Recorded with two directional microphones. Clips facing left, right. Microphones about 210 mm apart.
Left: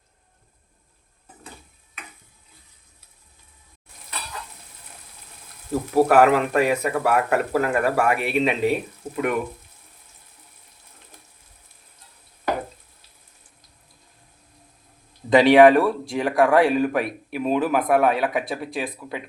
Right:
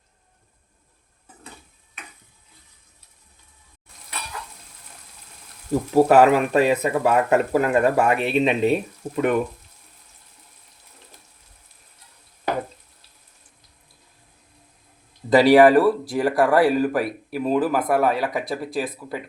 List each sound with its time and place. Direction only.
5.9 s speech: 20° right (ahead or behind)
9.0 s speech: 10° right (ahead or behind)
15.3 s speech: 5° right (ahead or behind)